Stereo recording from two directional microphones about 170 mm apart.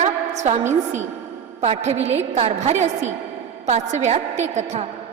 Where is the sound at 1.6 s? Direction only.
40° right (ahead or behind).